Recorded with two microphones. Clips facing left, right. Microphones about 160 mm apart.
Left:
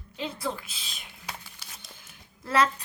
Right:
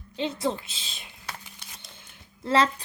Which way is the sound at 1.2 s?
5° left (ahead or behind).